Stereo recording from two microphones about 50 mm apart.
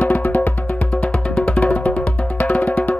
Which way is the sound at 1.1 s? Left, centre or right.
Centre.